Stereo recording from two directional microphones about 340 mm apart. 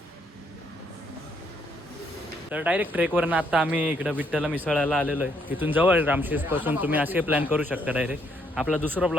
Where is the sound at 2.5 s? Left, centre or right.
Centre.